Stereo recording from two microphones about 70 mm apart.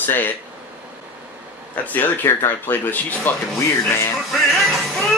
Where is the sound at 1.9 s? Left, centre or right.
Left.